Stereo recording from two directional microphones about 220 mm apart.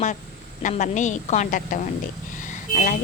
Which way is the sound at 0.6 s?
35° left (ahead or behind).